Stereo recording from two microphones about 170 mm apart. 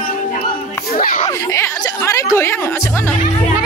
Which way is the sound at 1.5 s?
15° left (ahead or behind).